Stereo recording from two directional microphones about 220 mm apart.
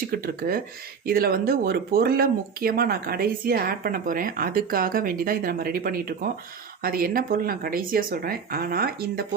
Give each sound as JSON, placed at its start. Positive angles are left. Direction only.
{"t": 0.1, "sound": "speech", "side_deg": -40}